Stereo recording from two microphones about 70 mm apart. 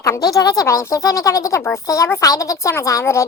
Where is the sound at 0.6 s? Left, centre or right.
Left.